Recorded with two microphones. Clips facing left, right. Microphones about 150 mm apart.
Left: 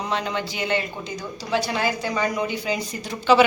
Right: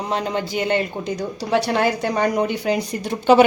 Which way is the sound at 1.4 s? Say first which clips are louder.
Right 5 dB; 60° right (ahead or behind).